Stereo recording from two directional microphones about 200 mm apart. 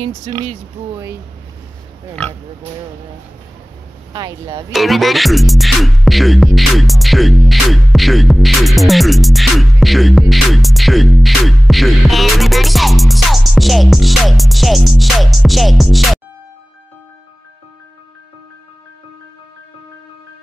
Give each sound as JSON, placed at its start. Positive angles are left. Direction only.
{"t": 4.1, "sound": "speech", "side_deg": -20}
{"t": 4.7, "sound": "music", "side_deg": 0}